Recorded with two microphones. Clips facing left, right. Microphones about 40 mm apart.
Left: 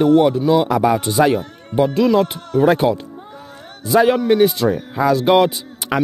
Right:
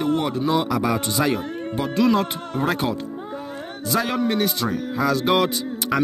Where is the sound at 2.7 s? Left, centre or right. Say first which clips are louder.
Left 8 dB; centre.